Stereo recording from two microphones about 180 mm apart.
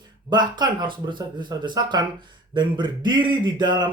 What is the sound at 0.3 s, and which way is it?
Speech, 25° right (ahead or behind).